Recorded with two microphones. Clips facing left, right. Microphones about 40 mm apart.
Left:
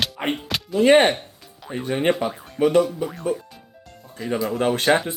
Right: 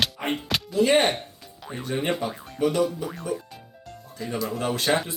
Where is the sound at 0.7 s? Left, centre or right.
Left.